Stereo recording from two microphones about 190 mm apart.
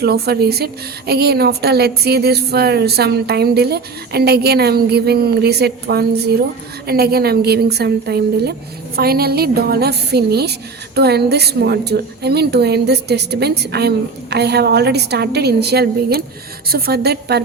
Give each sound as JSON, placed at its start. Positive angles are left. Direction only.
{"t": 0.0, "sound": "a woman's voice", "side_deg": -55}